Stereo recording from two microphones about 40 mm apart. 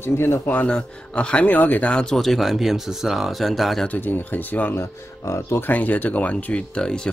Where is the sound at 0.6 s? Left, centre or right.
Left.